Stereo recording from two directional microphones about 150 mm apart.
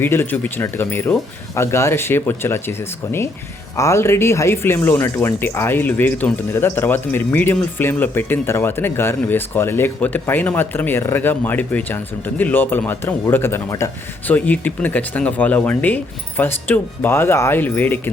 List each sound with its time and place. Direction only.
0.0 s speech: 15° left (ahead or behind)